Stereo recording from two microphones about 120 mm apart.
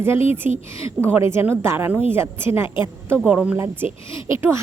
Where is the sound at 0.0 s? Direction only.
20° right (ahead or behind).